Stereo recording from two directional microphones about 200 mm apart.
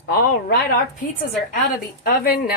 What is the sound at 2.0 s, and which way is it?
Speech, 45° left (ahead or behind).